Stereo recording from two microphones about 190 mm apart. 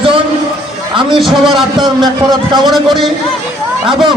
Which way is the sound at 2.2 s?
25° right (ahead or behind).